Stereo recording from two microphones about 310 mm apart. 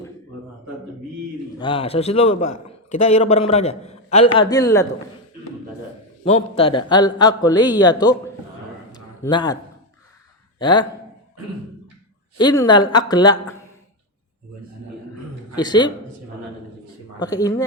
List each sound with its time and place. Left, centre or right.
1.5 s a man's voice: centre
6.2 s a man's voice: centre
8.9 s a sound: centre
10.6 s speech: centre
12.4 s a man's voice: centre
15.5 s a man's voice: centre
17.2 s a man's voice: centre